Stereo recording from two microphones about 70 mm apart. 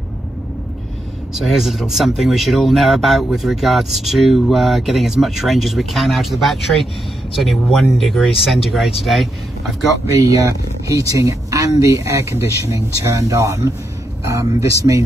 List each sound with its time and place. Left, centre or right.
1.3 s speech: centre
10.2 s speech: right